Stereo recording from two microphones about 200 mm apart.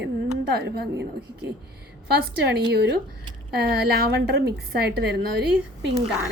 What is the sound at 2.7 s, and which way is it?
A woman's voice, 55° right (ahead or behind).